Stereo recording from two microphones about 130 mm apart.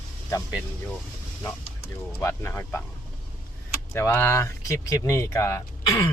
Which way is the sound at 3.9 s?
20° left (ahead or behind).